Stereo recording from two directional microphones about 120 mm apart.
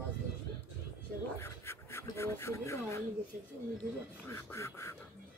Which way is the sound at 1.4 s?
20° left (ahead or behind).